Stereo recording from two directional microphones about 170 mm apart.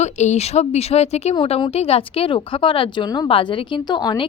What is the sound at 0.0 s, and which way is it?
Speech, 40° left (ahead or behind).